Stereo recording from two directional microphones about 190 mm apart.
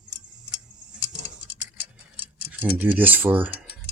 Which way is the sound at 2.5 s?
10° right (ahead or behind).